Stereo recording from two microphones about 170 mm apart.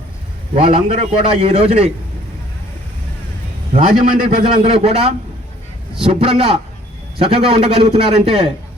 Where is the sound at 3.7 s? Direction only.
40° right (ahead or behind).